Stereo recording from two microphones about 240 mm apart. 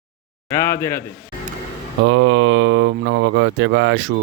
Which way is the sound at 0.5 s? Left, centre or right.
Centre.